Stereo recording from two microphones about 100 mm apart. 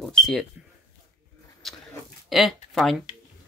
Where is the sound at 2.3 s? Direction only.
Centre (ahead or behind).